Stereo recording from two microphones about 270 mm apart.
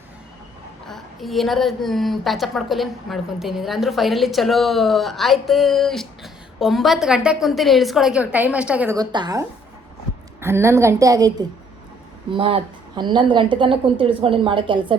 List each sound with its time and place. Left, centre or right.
0.9 s a woman's voice: centre